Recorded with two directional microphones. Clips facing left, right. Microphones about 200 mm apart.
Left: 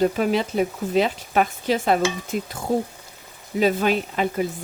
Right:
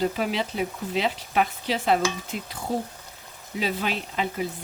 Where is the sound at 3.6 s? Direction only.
50° left (ahead or behind).